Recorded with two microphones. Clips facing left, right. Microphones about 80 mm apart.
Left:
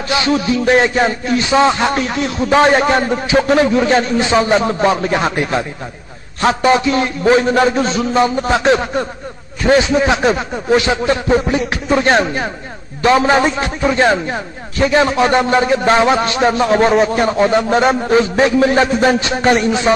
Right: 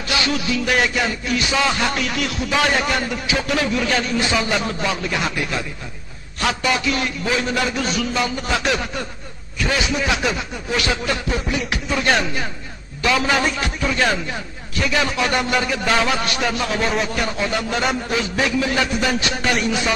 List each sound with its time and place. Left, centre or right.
0.1 s a man's voice: left